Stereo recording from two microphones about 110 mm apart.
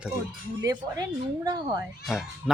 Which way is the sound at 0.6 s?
35° right (ahead or behind).